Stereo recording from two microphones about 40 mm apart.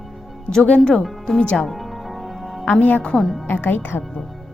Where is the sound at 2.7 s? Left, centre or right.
Left.